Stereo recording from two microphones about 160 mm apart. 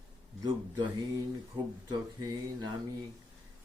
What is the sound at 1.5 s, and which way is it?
Speech, 30° right (ahead or behind).